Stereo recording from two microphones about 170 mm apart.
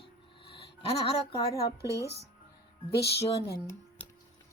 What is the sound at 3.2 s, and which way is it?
Speech, 35° left (ahead or behind).